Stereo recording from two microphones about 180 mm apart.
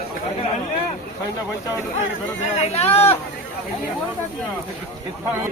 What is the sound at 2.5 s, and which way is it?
Speech, 35° left (ahead or behind).